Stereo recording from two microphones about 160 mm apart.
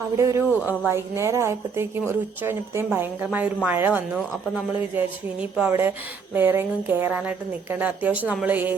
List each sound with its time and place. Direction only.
0.2 s a woman's voice: 15° right (ahead or behind)